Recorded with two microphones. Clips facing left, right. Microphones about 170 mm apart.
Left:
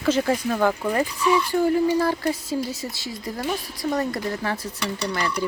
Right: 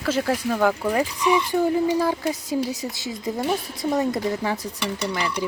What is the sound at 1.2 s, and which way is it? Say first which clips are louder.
A woman's voice: left 1 dB; 20° right (ahead or behind).